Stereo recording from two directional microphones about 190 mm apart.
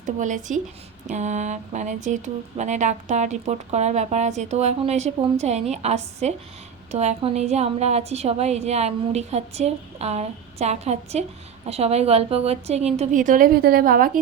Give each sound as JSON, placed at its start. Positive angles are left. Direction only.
{"t": 0.0, "sound": "speech", "side_deg": -40}